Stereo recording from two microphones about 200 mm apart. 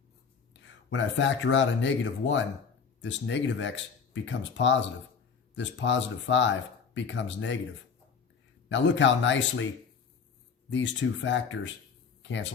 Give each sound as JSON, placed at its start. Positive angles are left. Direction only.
{"t": 0.6, "sound": "speech", "side_deg": 65}
{"t": 8.7, "sound": "speech", "side_deg": 65}
{"t": 10.7, "sound": "speech", "side_deg": 65}